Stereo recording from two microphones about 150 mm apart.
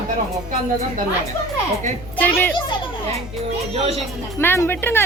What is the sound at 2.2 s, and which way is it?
Speech, 10° left (ahead or behind).